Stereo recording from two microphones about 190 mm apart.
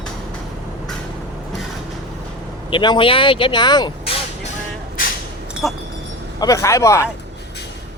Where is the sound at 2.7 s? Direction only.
25° left (ahead or behind).